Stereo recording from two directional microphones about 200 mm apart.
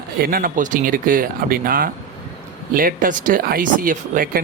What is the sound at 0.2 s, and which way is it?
Speech, 45° right (ahead or behind).